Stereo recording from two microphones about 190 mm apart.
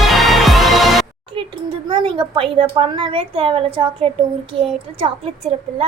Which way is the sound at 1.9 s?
25° right (ahead or behind).